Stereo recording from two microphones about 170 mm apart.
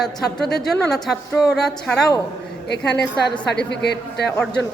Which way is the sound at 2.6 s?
80° left.